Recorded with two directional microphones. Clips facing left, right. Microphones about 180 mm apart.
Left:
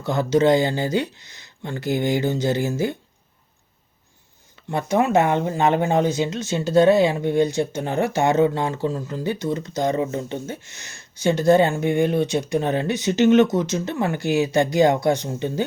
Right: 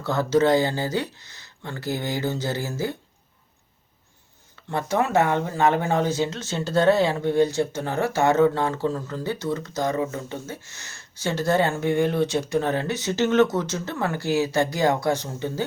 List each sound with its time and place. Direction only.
0.0 s speech: 15° left (ahead or behind)
4.7 s speech: 15° left (ahead or behind)